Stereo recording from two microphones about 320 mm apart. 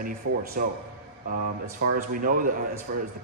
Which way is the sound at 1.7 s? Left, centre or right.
Right.